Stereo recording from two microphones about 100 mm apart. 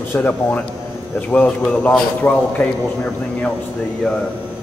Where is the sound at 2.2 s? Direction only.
25° left (ahead or behind).